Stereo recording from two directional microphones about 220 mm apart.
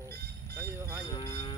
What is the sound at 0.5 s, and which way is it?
Vehicle, 10° right (ahead or behind).